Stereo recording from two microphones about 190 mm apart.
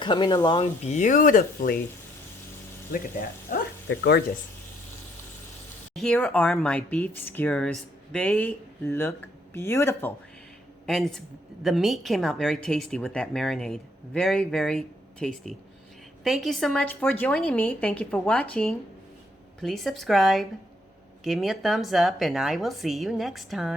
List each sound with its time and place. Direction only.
0.0 s speech: 25° left (ahead or behind)
0.6 s speech: 40° left (ahead or behind)
2.9 s speech: 50° left (ahead or behind)
3.8 s speech: 65° left (ahead or behind)
5.9 s speech: centre (ahead or behind)
10.8 s a woman's voice: centre (ahead or behind)